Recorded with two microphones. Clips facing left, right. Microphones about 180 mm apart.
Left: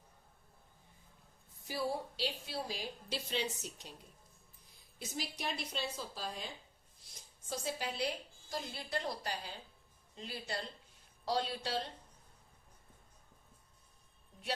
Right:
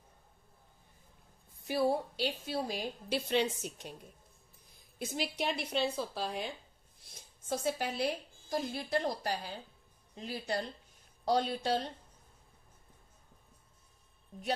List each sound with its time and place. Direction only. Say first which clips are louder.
1.6 s a woman's voice: right 7 dB; 60° right (ahead or behind)
4.9 s a woman's voice: right 7 dB; 65° right (ahead or behind)
7.5 s a woman's voice: right 6 dB; 55° right (ahead or behind)